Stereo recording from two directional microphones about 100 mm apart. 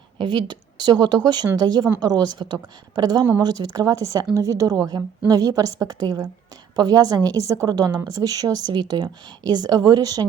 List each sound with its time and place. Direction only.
0.2 s a woman's voice: 45° right (ahead or behind)